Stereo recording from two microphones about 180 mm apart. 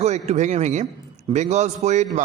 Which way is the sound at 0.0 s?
40° right (ahead or behind).